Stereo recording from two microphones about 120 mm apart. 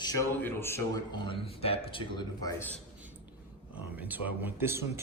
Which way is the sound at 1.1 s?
45° left (ahead or behind).